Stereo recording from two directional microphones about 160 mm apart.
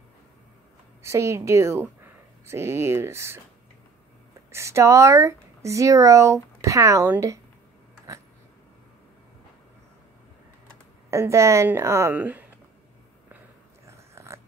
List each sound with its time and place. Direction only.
1.0 s speech: 20° right (ahead or behind)
4.5 s speech: 20° right (ahead or behind)
11.1 s speech: 15° right (ahead or behind)
13.8 s a sound: 15° right (ahead or behind)